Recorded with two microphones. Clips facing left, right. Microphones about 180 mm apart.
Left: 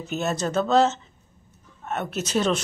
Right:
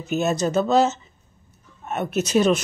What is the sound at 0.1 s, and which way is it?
Speech, 10° right (ahead or behind).